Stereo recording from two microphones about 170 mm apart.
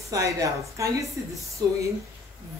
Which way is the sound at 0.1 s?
20° right (ahead or behind).